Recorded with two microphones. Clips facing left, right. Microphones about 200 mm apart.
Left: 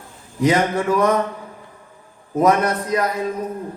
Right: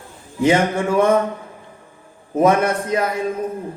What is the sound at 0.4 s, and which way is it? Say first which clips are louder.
Speech: right 1 dB; 25° right (ahead or behind).